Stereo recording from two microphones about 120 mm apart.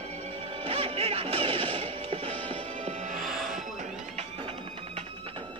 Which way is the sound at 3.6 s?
90° right.